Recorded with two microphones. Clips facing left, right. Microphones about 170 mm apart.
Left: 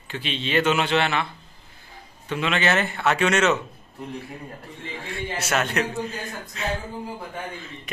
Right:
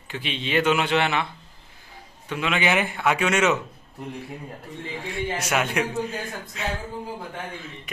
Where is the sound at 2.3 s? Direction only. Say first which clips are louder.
Left 1 dB; 10° right (ahead or behind).